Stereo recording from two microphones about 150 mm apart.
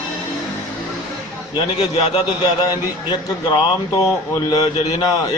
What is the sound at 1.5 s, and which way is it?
A man's voice, 40° left (ahead or behind).